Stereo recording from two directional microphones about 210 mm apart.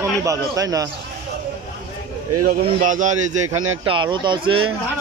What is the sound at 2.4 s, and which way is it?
Speech, 40° right (ahead or behind).